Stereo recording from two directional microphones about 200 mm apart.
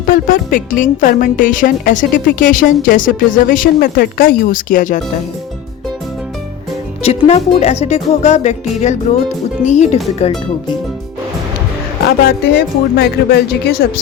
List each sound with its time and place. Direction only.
0.0 s speech: 45° left (ahead or behind)
7.0 s speech: 30° left (ahead or behind)
12.0 s speech: 55° left (ahead or behind)